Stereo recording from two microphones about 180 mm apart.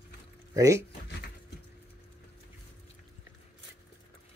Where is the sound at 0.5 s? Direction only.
15° right (ahead or behind).